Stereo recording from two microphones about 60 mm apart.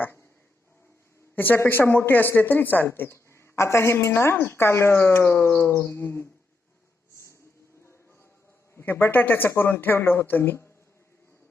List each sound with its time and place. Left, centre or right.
1.4 s a woman's voice: left
5.5 s bird: left
5.8 s a woman's voice: left
8.7 s a woman's voice: left